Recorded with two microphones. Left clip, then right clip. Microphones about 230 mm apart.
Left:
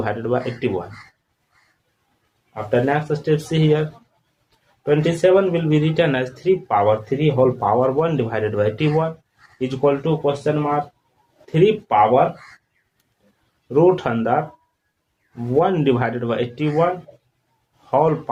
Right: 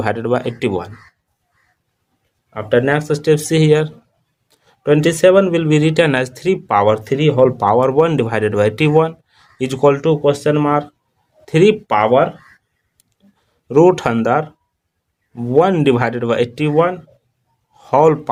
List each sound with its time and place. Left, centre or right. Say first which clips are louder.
0.0 s speech: right 4 dB; right
2.5 s speech: right 4 dB; right
13.7 s speech: right 4 dB; right
15.5 s speech: right 5 dB; right